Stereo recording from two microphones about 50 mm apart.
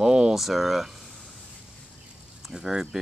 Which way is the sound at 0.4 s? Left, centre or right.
Centre.